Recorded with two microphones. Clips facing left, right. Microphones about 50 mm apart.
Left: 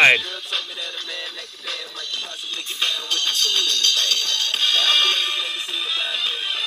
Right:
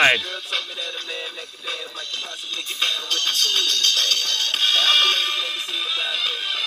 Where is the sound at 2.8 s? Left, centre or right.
Left.